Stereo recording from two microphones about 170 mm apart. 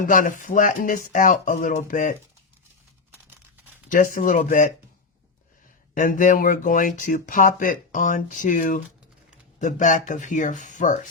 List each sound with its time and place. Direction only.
0.0 s speech: 50° left (ahead or behind)
3.8 s speech: 50° left (ahead or behind)
5.9 s speech: 50° left (ahead or behind)